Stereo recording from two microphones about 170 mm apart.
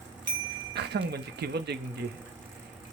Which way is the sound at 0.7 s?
75° right (ahead or behind).